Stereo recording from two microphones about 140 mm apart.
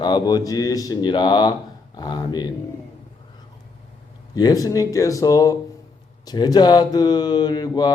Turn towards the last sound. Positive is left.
turn(degrees=30)  # may be behind; listen again after turning